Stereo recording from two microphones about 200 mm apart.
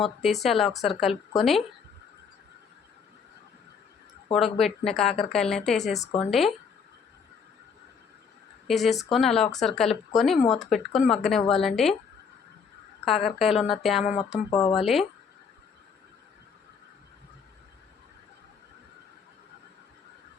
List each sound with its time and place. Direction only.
0.0 s speech: centre (ahead or behind)
4.3 s speech: centre (ahead or behind)
8.6 s speech: centre (ahead or behind)
13.1 s speech: centre (ahead or behind)
14.3 s speech: 25° left (ahead or behind)
14.7 s speech: centre (ahead or behind)